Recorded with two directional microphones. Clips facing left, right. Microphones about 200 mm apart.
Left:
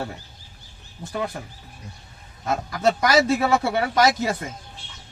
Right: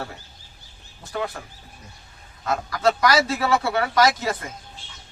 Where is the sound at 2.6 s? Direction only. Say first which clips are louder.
Right 1 dB; 20° left (ahead or behind).